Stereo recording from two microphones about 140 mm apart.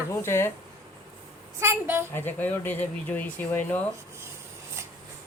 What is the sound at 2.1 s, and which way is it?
Speech, 15° left (ahead or behind).